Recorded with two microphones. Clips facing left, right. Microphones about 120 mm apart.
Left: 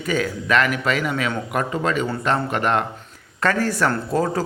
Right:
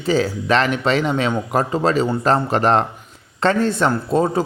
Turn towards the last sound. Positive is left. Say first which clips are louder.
# right 3 dB
turn(degrees=-20)  # may be behind; listen again after turning